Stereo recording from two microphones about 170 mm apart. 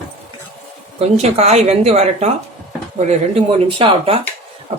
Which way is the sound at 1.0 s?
40° right (ahead or behind).